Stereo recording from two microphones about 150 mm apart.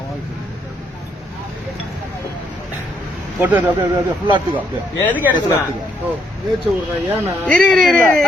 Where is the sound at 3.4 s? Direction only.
10° right (ahead or behind).